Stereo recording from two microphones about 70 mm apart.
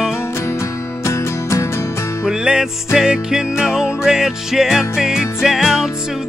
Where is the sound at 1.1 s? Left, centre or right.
Left.